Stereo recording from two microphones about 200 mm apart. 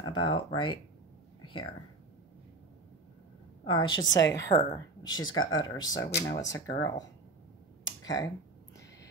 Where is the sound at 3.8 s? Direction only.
20° left (ahead or behind).